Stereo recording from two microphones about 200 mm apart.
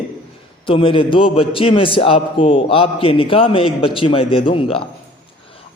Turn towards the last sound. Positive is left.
turn(degrees=25)  # may be behind; listen again after turning